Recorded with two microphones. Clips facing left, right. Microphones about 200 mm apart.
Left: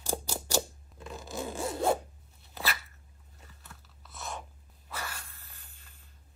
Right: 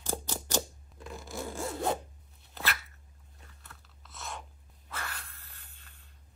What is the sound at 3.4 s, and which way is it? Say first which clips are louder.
Crunch: left 2 dB; centre (ahead or behind).